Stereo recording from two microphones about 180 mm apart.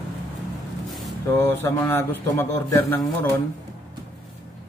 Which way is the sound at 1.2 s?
15° left (ahead or behind).